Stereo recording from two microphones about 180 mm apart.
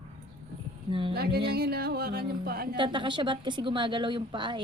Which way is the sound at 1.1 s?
60° right (ahead or behind).